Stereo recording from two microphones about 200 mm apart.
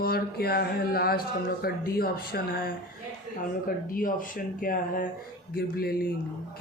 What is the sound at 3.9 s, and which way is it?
Speech, 45° left (ahead or behind).